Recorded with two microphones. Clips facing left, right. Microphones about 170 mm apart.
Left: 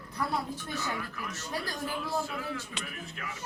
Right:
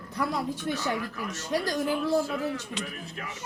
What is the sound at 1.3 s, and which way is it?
Speech, 75° right (ahead or behind).